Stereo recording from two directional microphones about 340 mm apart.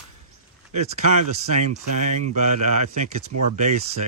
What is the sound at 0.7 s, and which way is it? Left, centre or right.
Speech, centre.